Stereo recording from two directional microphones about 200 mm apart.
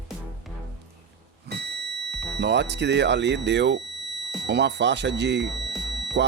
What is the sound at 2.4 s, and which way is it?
Speech, 60° right (ahead or behind).